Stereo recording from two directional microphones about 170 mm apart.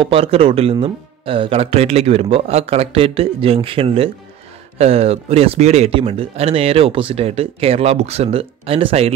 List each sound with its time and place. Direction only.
0.0 s speech: 35° right (ahead or behind)